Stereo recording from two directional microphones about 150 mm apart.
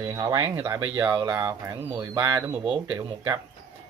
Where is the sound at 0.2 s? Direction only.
20° right (ahead or behind).